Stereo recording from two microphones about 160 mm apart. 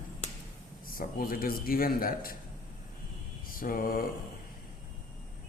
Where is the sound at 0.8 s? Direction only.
65° left (ahead or behind).